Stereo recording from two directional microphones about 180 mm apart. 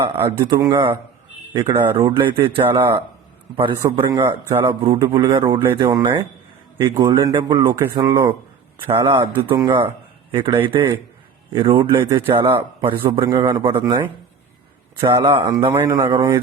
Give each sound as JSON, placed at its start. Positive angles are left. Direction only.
{"t": 0.3, "sound": "a man's voice", "side_deg": -15}
{"t": 10.3, "sound": "a man's voice", "side_deg": -30}
{"t": 15.0, "sound": "a man's voice", "side_deg": -25}
{"t": 15.7, "sound": "a man's voice", "side_deg": -15}